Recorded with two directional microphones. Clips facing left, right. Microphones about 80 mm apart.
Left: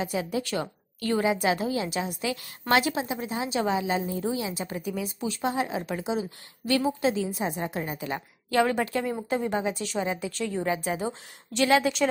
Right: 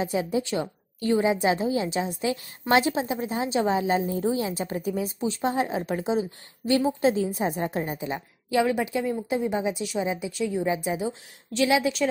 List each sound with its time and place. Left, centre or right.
0.0 s a woman's voice: right
8.5 s a woman's voice: centre
11.1 s speech: centre